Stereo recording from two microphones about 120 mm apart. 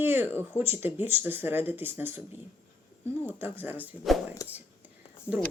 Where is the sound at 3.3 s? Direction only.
15° right (ahead or behind).